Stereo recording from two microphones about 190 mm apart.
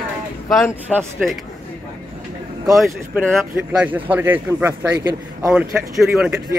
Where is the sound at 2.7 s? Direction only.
Centre (ahead or behind).